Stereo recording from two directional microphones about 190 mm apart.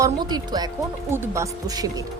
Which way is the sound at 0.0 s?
20° right (ahead or behind).